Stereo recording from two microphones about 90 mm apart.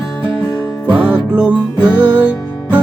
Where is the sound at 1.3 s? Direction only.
15° right (ahead or behind).